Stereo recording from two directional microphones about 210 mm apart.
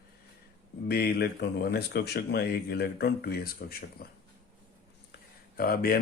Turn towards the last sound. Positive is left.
turn(degrees=45)  # may be behind; listen again after turning